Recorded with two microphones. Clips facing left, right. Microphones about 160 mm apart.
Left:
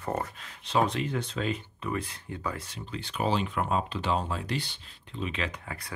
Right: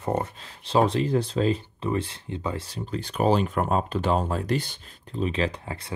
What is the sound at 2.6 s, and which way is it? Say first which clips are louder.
Speech: right 7 dB; 40° right (ahead or behind).